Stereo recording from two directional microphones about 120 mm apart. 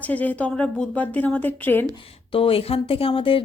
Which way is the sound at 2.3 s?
50° left (ahead or behind).